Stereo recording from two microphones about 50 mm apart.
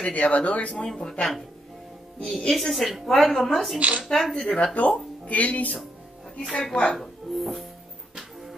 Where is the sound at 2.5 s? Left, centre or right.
Centre.